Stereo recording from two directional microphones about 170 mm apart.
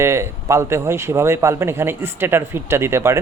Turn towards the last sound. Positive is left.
turn(degrees=-15)  # may be behind; listen again after turning